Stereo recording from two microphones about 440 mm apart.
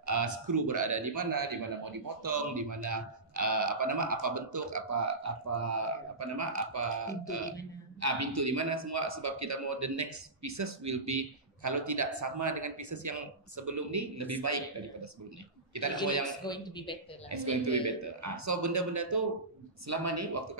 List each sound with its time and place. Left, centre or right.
0.0 s a man's voice: right
16.4 s speech: centre
17.3 s a man's voice: right